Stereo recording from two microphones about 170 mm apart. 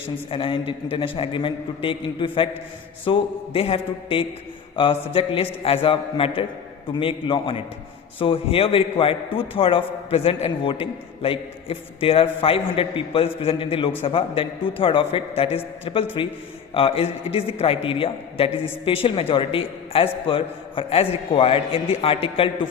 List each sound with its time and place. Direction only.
0.3 s a man's voice: 30° left (ahead or behind)